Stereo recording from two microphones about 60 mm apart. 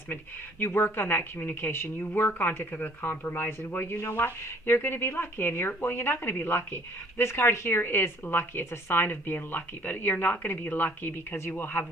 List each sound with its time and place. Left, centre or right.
0.6 s speech: left